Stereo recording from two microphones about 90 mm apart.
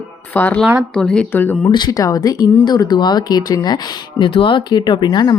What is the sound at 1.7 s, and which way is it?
Speech, 55° left (ahead or behind).